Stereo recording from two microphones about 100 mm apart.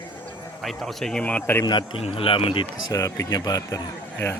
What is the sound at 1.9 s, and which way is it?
Speech, 65° left (ahead or behind).